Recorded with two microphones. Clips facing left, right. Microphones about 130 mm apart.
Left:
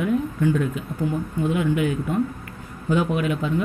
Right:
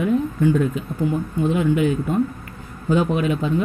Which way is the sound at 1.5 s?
30° right (ahead or behind).